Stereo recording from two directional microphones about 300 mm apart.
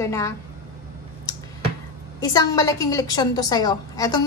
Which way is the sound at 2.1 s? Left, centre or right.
Centre.